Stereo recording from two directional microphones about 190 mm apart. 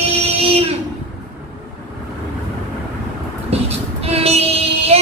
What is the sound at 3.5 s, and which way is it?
Vehicle, 30° right (ahead or behind).